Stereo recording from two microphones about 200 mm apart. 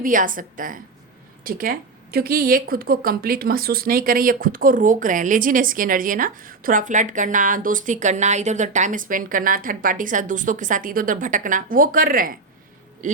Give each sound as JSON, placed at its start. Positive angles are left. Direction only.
{"t": 0.0, "sound": "speech", "side_deg": -40}